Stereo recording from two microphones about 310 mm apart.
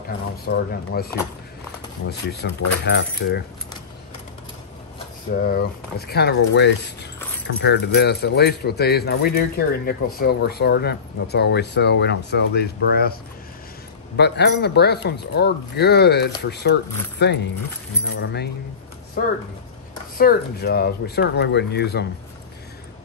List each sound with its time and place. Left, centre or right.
0.5 s speech: left
5.3 s speech: left
14.1 s speech: left
20.2 s speech: left